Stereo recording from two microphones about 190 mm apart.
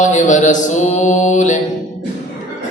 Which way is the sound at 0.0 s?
40° left (ahead or behind).